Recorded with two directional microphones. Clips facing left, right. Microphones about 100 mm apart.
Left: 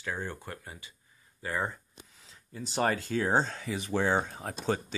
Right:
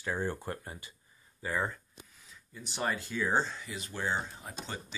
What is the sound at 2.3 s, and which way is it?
Speech, 50° left (ahead or behind).